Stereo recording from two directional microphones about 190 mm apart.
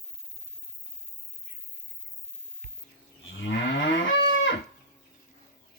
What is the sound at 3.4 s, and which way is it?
Moo, 70° left (ahead or behind).